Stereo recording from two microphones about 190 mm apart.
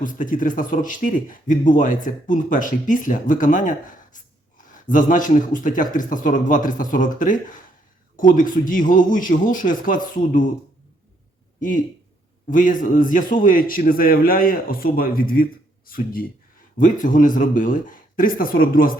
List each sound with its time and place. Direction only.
0.0 s speech: 45° left (ahead or behind)
12.5 s speech: 45° left (ahead or behind)